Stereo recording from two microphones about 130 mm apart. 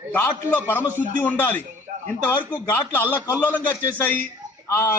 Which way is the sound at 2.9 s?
15° left (ahead or behind).